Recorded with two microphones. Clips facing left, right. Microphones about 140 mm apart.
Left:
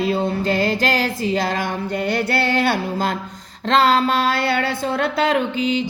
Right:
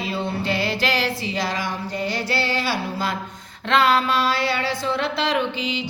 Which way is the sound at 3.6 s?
40° left (ahead or behind).